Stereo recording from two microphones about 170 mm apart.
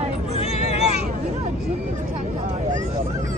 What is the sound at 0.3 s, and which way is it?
Vehicle, 40° left (ahead or behind).